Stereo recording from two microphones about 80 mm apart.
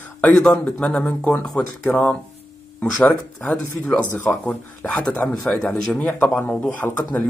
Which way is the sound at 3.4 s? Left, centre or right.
Centre.